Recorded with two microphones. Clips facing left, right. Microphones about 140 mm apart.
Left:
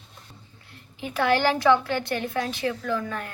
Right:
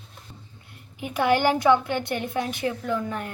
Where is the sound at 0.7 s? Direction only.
15° right (ahead or behind).